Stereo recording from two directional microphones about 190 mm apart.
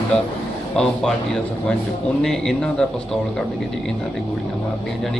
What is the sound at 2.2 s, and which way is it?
Speech, centre (ahead or behind).